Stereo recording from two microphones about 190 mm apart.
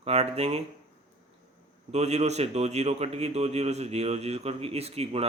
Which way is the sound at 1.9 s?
35° right (ahead or behind).